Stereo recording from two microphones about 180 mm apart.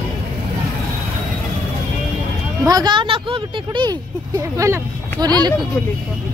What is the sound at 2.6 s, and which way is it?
Speech, 20° right (ahead or behind).